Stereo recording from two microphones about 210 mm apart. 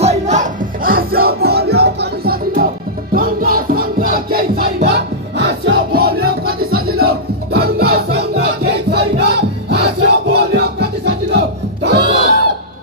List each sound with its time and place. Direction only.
0.0 s music: 35° right (ahead or behind); by 12.4 s 50° right (ahead or behind)